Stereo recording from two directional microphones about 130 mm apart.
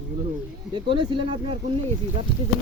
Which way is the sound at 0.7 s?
40° right (ahead or behind).